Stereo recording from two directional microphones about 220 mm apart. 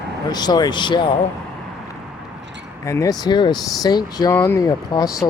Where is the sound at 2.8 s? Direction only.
15° left (ahead or behind).